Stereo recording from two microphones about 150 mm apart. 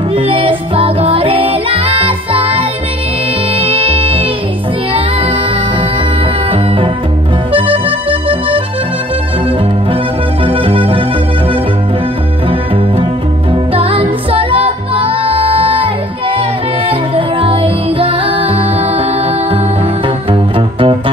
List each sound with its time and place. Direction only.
0.1 s music: 35° right (ahead or behind)
3.7 s music: 35° right (ahead or behind)
7.5 s accordion: 35° right (ahead or behind)
10.4 s music: 35° right (ahead or behind)
13.5 s music: 35° right (ahead or behind)
17.1 s music: 35° right (ahead or behind)
20.5 s music: 35° right (ahead or behind)